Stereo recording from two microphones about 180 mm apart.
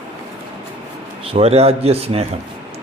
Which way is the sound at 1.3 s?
35° right (ahead or behind).